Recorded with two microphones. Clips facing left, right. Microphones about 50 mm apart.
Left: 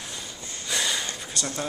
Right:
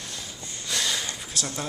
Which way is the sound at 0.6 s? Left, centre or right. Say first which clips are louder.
Left 1 dB; centre.